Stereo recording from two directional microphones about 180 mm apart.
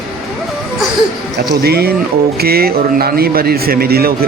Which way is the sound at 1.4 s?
60° right (ahead or behind).